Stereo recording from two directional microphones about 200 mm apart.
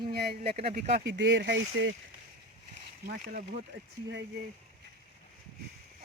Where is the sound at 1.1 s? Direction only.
60° right (ahead or behind).